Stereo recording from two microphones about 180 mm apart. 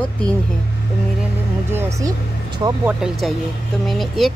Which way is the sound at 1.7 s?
15° right (ahead or behind).